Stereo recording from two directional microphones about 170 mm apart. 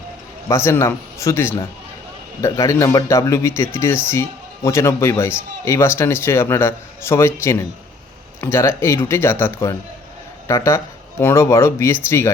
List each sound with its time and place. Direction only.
0.4 s speech: 15° left (ahead or behind)